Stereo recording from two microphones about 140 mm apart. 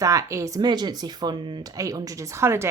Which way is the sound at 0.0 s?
25° right (ahead or behind).